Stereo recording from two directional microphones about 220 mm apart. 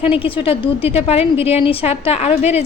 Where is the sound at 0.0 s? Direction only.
25° left (ahead or behind).